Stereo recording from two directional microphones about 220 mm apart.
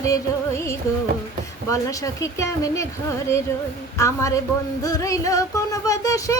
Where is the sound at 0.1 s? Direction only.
15° left (ahead or behind).